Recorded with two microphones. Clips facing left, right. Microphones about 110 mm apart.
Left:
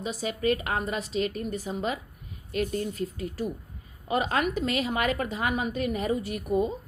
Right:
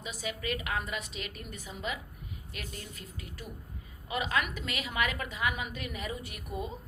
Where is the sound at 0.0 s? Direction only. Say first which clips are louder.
Left 9 dB; 35° left (ahead or behind).